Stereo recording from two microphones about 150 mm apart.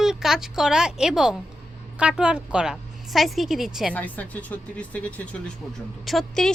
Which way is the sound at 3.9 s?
10° left (ahead or behind).